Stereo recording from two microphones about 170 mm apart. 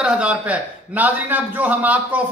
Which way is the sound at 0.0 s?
5° right (ahead or behind).